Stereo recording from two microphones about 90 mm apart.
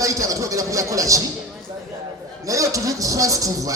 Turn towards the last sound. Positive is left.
turn(degrees=-40)  # may be behind; listen again after turning